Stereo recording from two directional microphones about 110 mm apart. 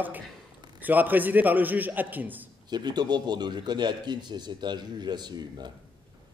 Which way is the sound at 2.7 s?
40° right (ahead or behind).